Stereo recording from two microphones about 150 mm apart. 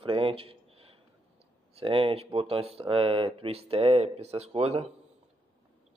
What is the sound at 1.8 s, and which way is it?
A man's voice, 35° right (ahead or behind).